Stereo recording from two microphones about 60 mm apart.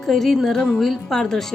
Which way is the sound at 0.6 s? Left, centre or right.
Centre.